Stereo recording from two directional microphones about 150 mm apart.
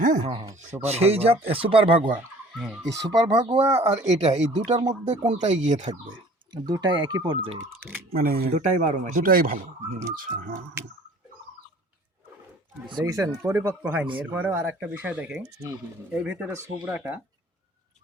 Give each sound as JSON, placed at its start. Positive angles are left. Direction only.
{"t": 0.0, "sound": "a sound", "side_deg": -60}
{"t": 0.3, "sound": "speech", "side_deg": -25}
{"t": 0.8, "sound": "speech", "side_deg": -45}
{"t": 2.6, "sound": "speech", "side_deg": 0}
{"t": 2.9, "sound": "speech", "side_deg": -25}
{"t": 3.7, "sound": "speech", "side_deg": -45}
{"t": 4.8, "sound": "speech", "side_deg": -30}
{"t": 5.2, "sound": "speech", "side_deg": -50}
{"t": 5.9, "sound": "speech", "side_deg": -30}
{"t": 8.1, "sound": "speech", "side_deg": -80}
{"t": 8.5, "sound": "speech", "side_deg": -55}
{"t": 9.2, "sound": "speech", "side_deg": -75}
{"t": 12.8, "sound": "speech", "side_deg": -25}